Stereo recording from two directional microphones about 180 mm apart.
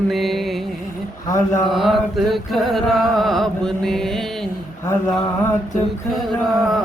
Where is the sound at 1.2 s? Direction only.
15° left (ahead or behind).